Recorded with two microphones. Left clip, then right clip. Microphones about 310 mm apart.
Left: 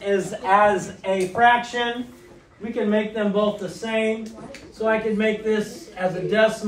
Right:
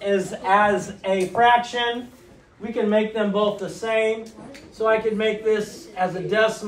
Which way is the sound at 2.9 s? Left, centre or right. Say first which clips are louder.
Right 1 dB; centre.